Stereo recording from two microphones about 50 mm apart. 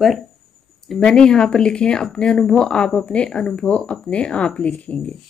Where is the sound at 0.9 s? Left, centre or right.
Centre.